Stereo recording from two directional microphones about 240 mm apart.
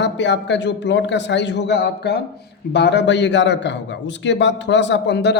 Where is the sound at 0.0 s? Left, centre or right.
Left.